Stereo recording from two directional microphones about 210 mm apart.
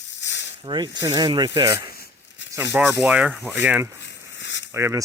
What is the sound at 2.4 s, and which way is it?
Tearing, 60° left (ahead or behind).